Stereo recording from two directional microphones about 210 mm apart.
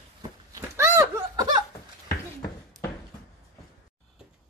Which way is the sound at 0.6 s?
10° right (ahead or behind).